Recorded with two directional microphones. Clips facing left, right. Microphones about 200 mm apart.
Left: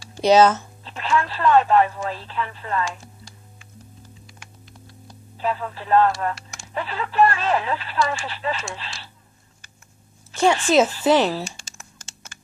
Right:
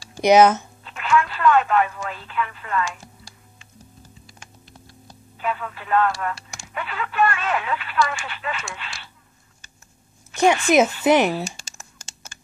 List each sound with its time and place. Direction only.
0.1 s speech: 15° right (ahead or behind)
0.8 s speech: 30° left (ahead or behind)
5.4 s speech: 30° left (ahead or behind)
10.7 s speech: 15° right (ahead or behind)
11.4 s typing: 40° right (ahead or behind)